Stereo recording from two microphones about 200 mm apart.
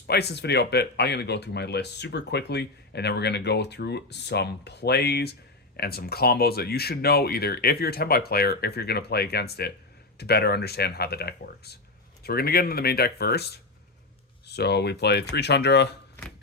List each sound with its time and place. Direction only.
0.1 s speech: 55° left (ahead or behind)